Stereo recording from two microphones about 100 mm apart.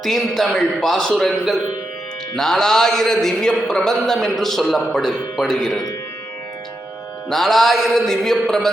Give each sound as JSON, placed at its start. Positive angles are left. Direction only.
{"t": 0.0, "sound": "a man's voice", "side_deg": 0}
{"t": 7.3, "sound": "a man's voice", "side_deg": 5}